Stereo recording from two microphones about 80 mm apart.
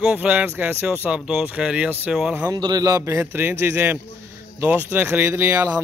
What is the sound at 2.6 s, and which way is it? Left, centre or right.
Speech, right.